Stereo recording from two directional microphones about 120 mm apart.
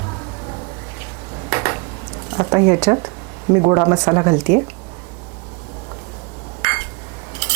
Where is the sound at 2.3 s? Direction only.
25° right (ahead or behind).